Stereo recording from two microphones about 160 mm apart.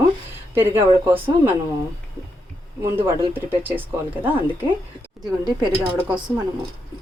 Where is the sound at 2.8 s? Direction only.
15° right (ahead or behind).